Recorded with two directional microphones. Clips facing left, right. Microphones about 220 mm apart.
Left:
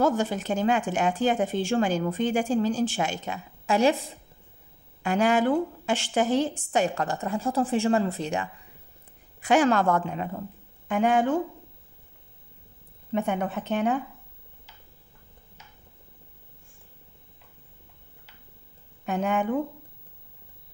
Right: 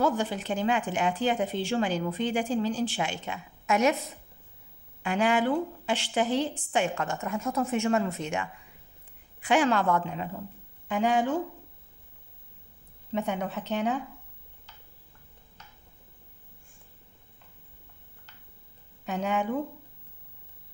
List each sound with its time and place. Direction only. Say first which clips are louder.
0.0 s speech: left 3 dB; 45° left (ahead or behind)
5.0 s a woman's voice: left 3 dB; 40° left (ahead or behind)
13.1 s speech: left 3 dB; 55° left (ahead or behind)
19.0 s speech: left 3 dB; 50° left (ahead or behind)